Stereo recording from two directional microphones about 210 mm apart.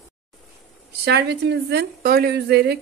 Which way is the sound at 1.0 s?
55° right (ahead or behind).